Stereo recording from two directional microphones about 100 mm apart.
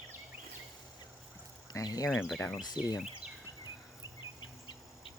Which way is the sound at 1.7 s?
40° left (ahead or behind).